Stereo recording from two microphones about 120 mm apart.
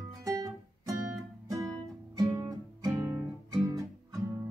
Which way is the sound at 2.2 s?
30° right (ahead or behind).